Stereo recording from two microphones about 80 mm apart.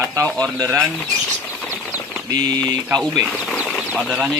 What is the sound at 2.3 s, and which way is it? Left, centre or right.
Speech, right.